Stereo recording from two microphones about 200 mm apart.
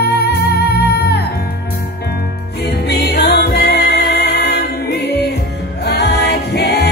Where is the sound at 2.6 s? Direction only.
55° left (ahead or behind).